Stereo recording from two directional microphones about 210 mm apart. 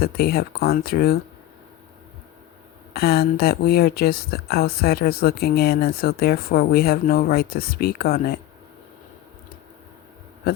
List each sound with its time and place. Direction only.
0.0 s speech: 50° left (ahead or behind)
2.9 s speech: 50° left (ahead or behind)